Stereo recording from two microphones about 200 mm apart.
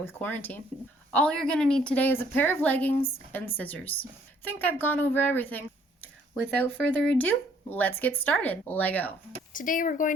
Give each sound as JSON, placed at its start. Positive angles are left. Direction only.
{"t": 0.0, "sound": "speech", "side_deg": 10}
{"t": 9.5, "sound": "speech", "side_deg": 40}